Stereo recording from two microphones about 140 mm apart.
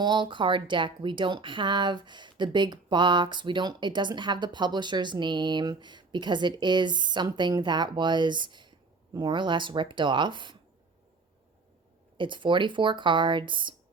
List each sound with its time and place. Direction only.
0.0 s speech: 35° right (ahead or behind)
12.1 s speech: 35° right (ahead or behind)